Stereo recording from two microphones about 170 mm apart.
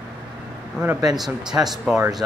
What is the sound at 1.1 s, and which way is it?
Speech, centre (ahead or behind).